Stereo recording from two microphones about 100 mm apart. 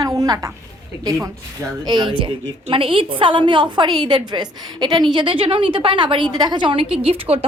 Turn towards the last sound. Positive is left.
turn(degrees=-70)  # may be behind; listen again after turning